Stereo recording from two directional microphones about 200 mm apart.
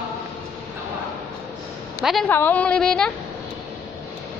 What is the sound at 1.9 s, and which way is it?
A woman's voice, centre (ahead or behind).